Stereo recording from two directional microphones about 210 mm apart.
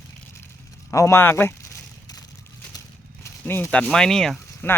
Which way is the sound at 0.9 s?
15° left (ahead or behind).